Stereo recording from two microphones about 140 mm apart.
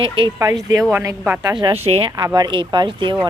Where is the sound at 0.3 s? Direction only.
25° right (ahead or behind).